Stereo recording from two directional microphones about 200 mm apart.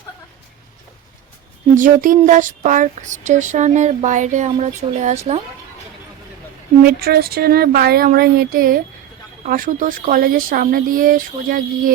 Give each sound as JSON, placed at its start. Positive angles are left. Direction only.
{"t": 1.7, "sound": "speech", "side_deg": -40}
{"t": 6.8, "sound": "speech", "side_deg": -50}